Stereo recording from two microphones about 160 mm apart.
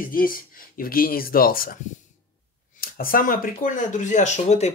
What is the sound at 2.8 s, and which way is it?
Speech, 60° left (ahead or behind).